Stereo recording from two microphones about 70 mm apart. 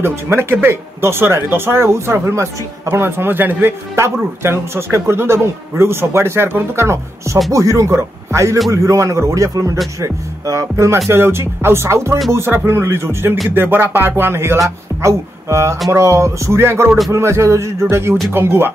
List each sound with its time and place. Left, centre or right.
0.0 s speech: right
3.9 s a man's voice: right